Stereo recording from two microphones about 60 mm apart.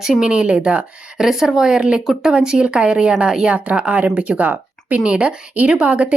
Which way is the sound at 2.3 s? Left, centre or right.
Centre.